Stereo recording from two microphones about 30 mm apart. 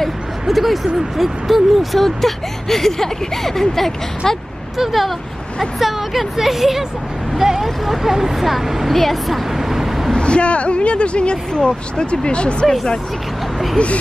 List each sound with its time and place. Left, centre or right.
0.5 s speech: centre
4.7 s speech: centre
7.6 s speech: centre
10.1 s speech: left
13.8 s speech: left